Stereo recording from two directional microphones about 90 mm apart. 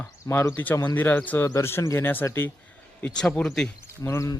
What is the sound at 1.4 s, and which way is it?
A man's voice, 30° left (ahead or behind).